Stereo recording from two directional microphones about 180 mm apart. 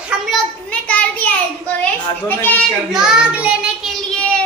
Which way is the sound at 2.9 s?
5° right (ahead or behind).